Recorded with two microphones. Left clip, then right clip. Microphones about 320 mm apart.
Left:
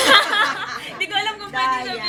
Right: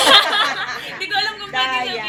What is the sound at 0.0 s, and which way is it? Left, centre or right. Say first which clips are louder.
Chatter: right 2 dB; centre.